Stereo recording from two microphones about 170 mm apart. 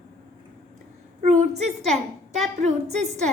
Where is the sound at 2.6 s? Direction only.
40° right (ahead or behind).